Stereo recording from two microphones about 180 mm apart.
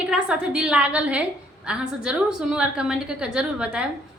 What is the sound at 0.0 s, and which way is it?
A woman's voice, 5° right (ahead or behind).